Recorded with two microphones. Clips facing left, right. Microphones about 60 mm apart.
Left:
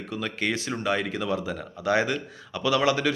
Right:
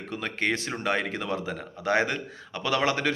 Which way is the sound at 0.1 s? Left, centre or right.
Right.